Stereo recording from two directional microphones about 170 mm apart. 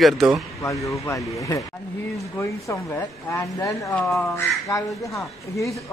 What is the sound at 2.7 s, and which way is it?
Speech, 15° left (ahead or behind).